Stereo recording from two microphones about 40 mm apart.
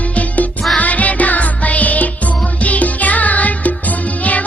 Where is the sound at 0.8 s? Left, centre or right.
Left.